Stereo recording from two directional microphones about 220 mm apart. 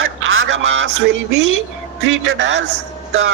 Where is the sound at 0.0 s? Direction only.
65° right (ahead or behind).